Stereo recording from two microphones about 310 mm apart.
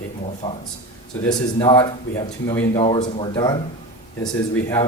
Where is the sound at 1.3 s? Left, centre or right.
Centre.